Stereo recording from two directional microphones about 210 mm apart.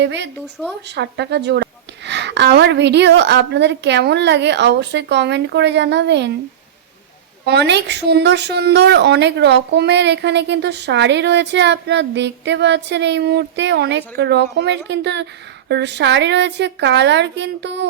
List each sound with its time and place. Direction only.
0.0 s a woman's voice: 55° right (ahead or behind)
7.4 s a woman's voice: 50° right (ahead or behind)